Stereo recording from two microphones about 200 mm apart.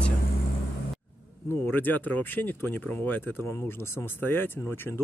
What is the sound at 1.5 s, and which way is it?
Speech, 10° left (ahead or behind).